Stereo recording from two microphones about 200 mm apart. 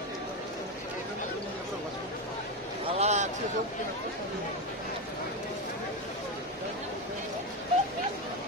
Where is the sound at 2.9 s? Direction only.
35° right (ahead or behind).